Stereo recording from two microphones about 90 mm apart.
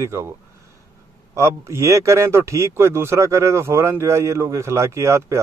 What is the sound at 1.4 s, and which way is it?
Speech, 35° right (ahead or behind).